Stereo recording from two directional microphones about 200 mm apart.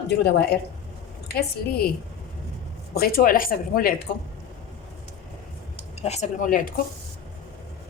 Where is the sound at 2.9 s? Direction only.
50° left (ahead or behind).